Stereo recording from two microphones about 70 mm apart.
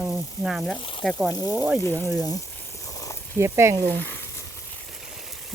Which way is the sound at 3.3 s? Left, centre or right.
Right.